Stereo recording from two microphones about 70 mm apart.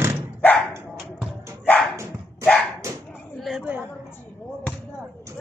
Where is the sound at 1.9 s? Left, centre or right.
Right.